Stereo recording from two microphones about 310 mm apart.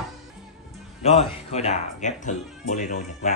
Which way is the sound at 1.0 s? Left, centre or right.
Centre.